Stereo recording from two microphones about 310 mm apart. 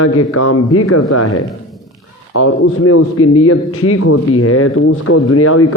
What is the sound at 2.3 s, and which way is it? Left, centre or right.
A man's voice, left.